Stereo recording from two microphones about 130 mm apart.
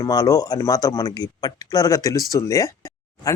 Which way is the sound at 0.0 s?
30° left (ahead or behind).